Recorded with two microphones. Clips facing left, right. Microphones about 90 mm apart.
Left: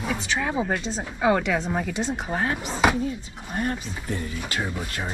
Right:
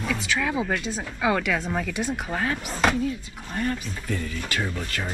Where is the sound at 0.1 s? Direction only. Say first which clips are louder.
Even; 20° left (ahead or behind).